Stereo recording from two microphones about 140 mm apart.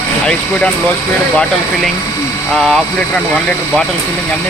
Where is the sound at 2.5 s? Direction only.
Centre (ahead or behind).